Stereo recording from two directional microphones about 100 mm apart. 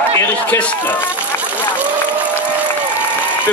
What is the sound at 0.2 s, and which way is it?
Speech, 15° left (ahead or behind).